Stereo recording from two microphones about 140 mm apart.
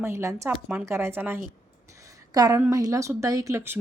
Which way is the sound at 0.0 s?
20° right (ahead or behind).